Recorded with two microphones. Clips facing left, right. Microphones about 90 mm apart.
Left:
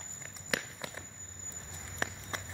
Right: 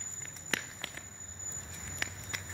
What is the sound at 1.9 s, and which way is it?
Walk, 35° left (ahead or behind).